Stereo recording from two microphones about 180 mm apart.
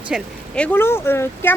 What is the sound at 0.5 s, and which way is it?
Speech, 10° left (ahead or behind).